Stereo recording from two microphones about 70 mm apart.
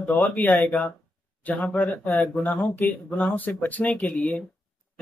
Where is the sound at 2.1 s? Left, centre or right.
Left.